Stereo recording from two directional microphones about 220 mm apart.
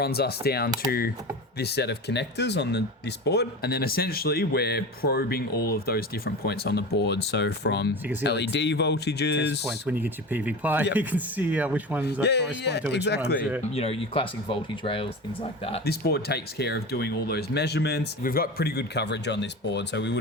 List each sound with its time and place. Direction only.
0.0 s a man's voice: 45° left (ahead or behind)
9.8 s speech: 10° right (ahead or behind)
12.2 s a man's voice: 50° left (ahead or behind)
13.7 s speech: 25° left (ahead or behind)
15.8 s a man's voice: 45° left (ahead or behind)